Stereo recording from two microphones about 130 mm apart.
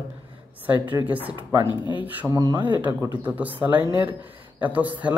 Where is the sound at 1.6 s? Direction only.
40° left (ahead or behind).